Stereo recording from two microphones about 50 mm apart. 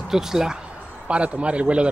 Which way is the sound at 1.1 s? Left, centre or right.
Right.